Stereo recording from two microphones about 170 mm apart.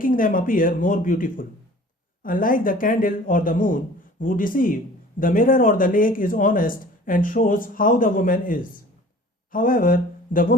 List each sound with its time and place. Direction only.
0.0 s speech: 55° left (ahead or behind)